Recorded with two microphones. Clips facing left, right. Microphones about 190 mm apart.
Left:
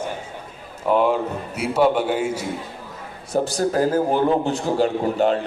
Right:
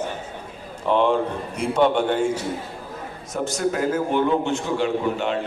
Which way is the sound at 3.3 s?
35° left (ahead or behind).